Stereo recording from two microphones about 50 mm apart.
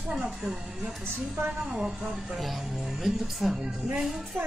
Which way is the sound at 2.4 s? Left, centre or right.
Centre.